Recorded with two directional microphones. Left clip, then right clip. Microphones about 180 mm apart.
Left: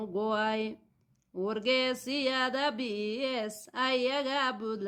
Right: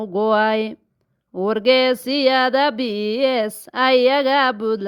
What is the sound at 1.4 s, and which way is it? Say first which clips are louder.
Speech: right 13 dB; 45° right (ahead or behind).